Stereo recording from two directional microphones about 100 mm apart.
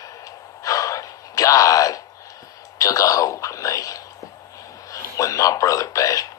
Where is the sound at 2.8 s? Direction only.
35° left (ahead or behind).